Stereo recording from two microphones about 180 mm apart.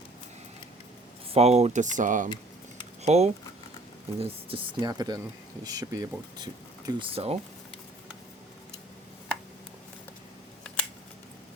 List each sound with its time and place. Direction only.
1.3 s speech: 35° right (ahead or behind)